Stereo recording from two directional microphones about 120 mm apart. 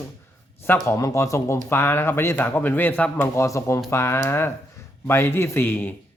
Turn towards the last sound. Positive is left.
turn(degrees=15)  # may be behind; listen again after turning